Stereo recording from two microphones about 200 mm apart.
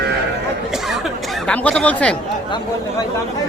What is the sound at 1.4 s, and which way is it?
Speech, 5° left (ahead or behind).